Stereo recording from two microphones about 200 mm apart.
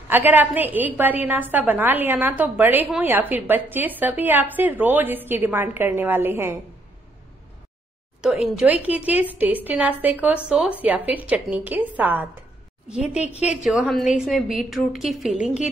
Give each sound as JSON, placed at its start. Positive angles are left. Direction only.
{"t": 0.1, "sound": "a woman's voice", "side_deg": -10}
{"t": 8.2, "sound": "a woman's voice", "side_deg": -5}
{"t": 13.2, "sound": "a woman's voice", "side_deg": 30}
{"t": 13.7, "sound": "a woman's voice", "side_deg": 0}